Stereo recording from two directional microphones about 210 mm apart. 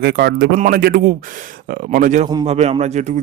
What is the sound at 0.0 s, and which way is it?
Speech, 50° right (ahead or behind).